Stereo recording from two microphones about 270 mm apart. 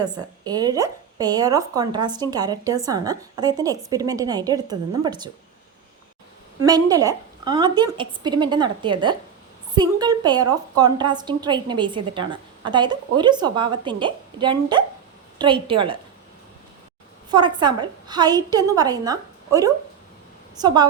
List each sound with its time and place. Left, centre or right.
0.0 s a woman's voice: centre
6.6 s a woman's voice: centre
17.3 s a woman's voice: centre